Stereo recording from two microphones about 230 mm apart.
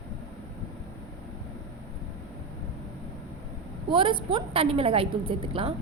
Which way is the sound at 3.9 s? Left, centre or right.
Right.